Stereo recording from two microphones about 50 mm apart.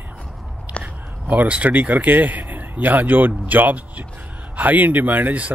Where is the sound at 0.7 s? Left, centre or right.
Right.